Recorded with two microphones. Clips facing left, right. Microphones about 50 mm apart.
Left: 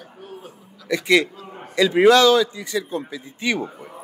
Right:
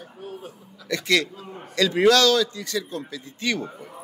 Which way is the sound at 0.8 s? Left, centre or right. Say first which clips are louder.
Left 5 dB; centre.